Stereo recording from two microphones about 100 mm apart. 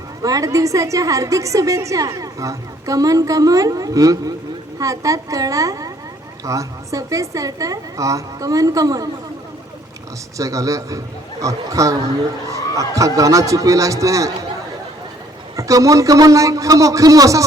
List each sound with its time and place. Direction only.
0.2 s a woman's voice: 35° right (ahead or behind)
10.3 s a woman's voice: 35° right (ahead or behind)
15.5 s a woman's voice: 35° right (ahead or behind)